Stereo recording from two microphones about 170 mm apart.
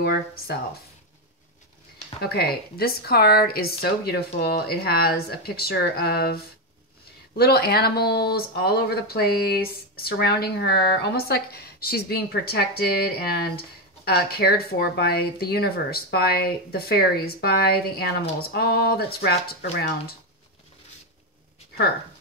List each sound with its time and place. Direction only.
0.0 s speech: 65° left (ahead or behind)
2.2 s speech: 70° left (ahead or behind)